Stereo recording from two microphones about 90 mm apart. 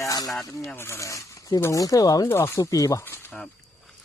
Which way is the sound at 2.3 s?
30° left (ahead or behind).